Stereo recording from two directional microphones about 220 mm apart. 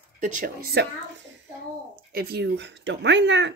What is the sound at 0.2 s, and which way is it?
Speech, 35° right (ahead or behind).